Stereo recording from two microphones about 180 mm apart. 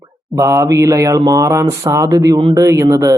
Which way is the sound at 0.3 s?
15° right (ahead or behind).